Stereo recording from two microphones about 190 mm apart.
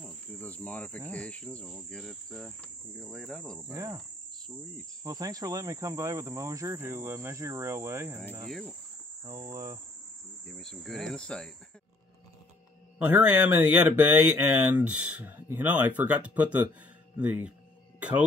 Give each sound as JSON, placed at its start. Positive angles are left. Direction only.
{"t": 0.0, "sound": "cricket", "side_deg": 10}
{"t": 3.7, "sound": "cricket", "side_deg": -20}
{"t": 5.0, "sound": "speech", "side_deg": -20}
{"t": 8.5, "sound": "cricket", "side_deg": 0}
{"t": 9.2, "sound": "cricket", "side_deg": -20}
{"t": 10.4, "sound": "cricket", "side_deg": 0}
{"t": 13.0, "sound": "speech", "side_deg": -10}